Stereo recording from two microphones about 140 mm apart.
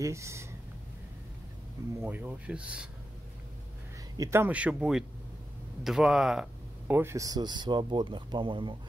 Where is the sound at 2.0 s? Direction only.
10° right (ahead or behind).